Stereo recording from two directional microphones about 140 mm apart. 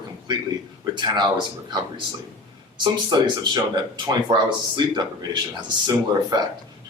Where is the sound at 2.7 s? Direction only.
30° right (ahead or behind).